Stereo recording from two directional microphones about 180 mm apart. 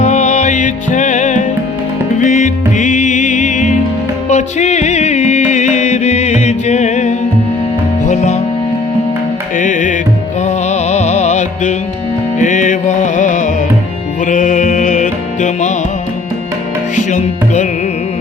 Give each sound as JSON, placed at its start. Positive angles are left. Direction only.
{"t": 0.0, "sound": "music", "side_deg": 40}
{"t": 9.6, "sound": "music", "side_deg": 45}
{"t": 16.9, "sound": "music", "side_deg": 45}